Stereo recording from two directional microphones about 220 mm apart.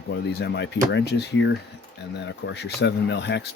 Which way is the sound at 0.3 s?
50° left (ahead or behind).